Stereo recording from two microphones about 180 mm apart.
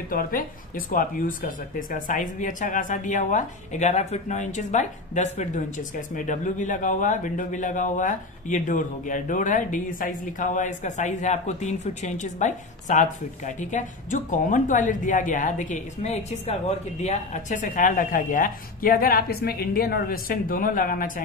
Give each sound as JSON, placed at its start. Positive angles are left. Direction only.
{"t": 0.1, "sound": "speech", "side_deg": 50}